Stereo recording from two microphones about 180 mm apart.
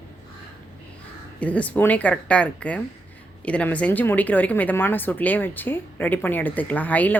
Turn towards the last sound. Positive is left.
turn(degrees=10)  # may be behind; listen again after turning